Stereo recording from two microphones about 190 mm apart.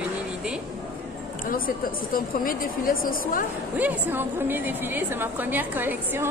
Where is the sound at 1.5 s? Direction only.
45° left (ahead or behind).